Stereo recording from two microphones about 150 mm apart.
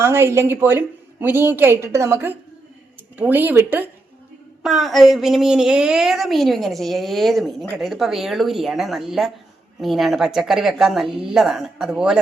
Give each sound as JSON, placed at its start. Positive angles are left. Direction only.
{"t": 0.0, "sound": "a woman's voice", "side_deg": -15}
{"t": 4.6, "sound": "a woman's voice", "side_deg": 0}